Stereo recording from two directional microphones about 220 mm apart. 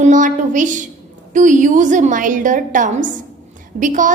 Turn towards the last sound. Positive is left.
turn(degrees=-35)  # may be behind; listen again after turning